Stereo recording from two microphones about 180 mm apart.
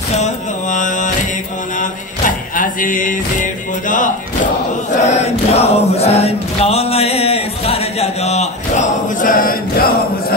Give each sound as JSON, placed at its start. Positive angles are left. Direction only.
{"t": 0.1, "sound": "mantra", "side_deg": 40}
{"t": 1.8, "sound": "music", "side_deg": 50}
{"t": 5.0, "sound": "choir", "side_deg": 35}